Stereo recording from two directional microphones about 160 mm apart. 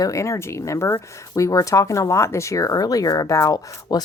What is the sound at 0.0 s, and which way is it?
Speech, 20° left (ahead or behind).